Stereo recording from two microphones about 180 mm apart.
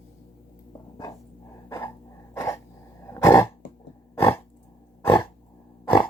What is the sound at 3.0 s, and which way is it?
Cough, 15° left (ahead or behind).